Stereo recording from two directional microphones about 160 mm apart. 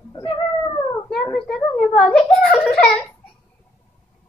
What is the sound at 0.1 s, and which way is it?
Cat, 30° left (ahead or behind).